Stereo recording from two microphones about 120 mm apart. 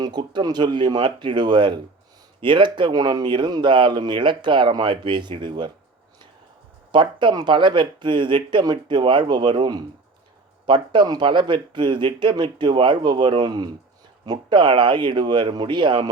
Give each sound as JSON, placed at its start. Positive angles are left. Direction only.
{"t": 0.0, "sound": "speech", "side_deg": -35}
{"t": 6.9, "sound": "speech", "side_deg": -40}